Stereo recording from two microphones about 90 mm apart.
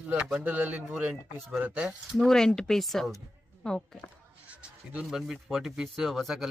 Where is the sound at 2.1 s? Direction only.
5° left (ahead or behind).